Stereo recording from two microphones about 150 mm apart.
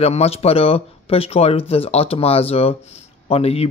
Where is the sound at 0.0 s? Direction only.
45° left (ahead or behind).